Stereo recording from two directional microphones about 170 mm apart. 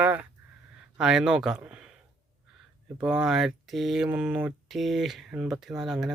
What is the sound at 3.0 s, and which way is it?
Speech, 5° right (ahead or behind).